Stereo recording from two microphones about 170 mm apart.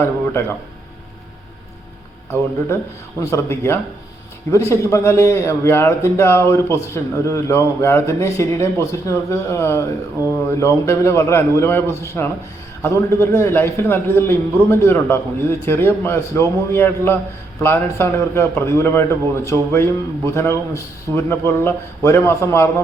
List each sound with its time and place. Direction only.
0.0 s speech: 15° left (ahead or behind)
3.2 s a man's voice: 15° left (ahead or behind)